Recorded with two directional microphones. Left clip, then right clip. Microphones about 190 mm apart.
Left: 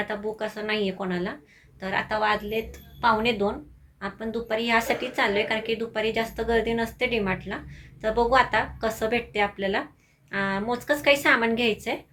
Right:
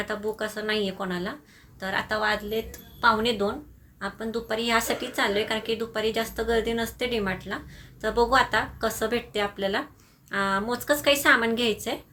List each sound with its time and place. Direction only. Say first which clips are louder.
0.0 s a woman's voice: even; 20° right (ahead or behind)